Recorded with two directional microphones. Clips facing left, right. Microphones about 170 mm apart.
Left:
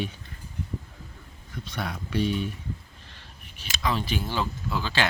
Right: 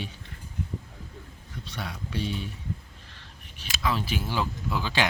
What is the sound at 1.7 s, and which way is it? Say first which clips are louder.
Speech: left 5 dB; 55° left (ahead or behind).